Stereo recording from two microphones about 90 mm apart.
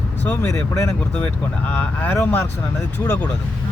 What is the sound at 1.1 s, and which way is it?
Speech, 20° left (ahead or behind).